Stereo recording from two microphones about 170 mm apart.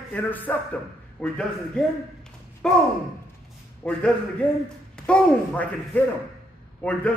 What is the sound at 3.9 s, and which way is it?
Speech, 5° left (ahead or behind).